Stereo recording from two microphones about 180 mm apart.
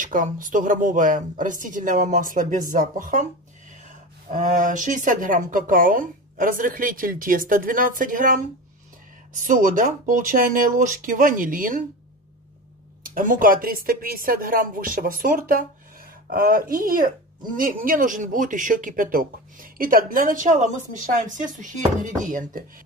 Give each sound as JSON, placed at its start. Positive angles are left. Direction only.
{"t": 0.0, "sound": "speech", "side_deg": -45}
{"t": 13.0, "sound": "speech", "side_deg": -50}